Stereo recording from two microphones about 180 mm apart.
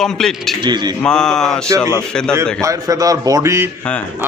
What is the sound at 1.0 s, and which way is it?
A man's voice, 5° left (ahead or behind).